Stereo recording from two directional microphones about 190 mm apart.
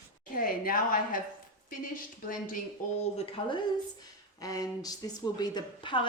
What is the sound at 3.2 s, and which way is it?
A woman's voice, 30° left (ahead or behind).